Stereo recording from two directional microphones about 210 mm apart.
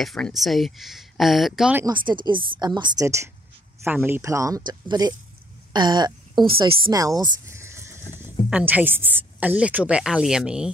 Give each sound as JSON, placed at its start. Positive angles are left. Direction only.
{"t": 0.0, "sound": "a woman's voice", "side_deg": 0}
{"t": 1.9, "sound": "a woman's voice", "side_deg": -20}
{"t": 7.2, "sound": "sheep", "side_deg": -15}
{"t": 8.5, "sound": "a woman's voice", "side_deg": -5}